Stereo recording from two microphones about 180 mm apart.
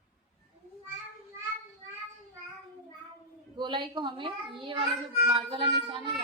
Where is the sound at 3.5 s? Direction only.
25° right (ahead or behind).